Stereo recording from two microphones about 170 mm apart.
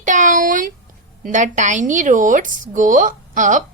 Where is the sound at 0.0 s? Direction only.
50° right (ahead or behind).